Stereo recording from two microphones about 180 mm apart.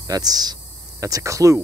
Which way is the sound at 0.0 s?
20° right (ahead or behind).